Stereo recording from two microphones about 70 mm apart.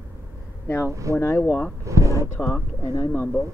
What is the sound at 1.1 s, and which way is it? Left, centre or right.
Speech, left.